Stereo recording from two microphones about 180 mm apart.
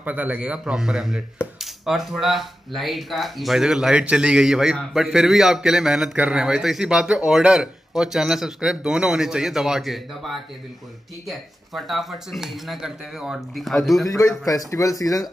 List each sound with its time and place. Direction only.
0.0 s speech: 10° right (ahead or behind)
14.0 s speech: 20° left (ahead or behind)